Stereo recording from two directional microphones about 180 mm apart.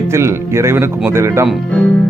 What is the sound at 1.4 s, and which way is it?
Speech, centre (ahead or behind).